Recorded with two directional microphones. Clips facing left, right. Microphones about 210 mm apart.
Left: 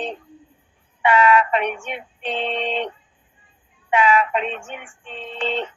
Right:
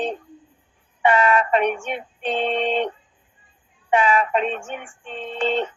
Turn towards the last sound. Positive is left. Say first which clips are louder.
# right 3 dB
turn(degrees=-45)  # may be behind; listen again after turning